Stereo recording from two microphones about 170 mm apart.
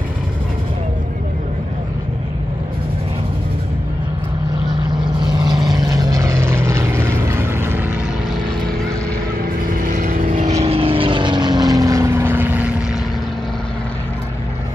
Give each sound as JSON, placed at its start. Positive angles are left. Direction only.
{"t": 5.2, "sound": "vehicle", "side_deg": -25}
{"t": 9.7, "sound": "vehicle", "side_deg": -55}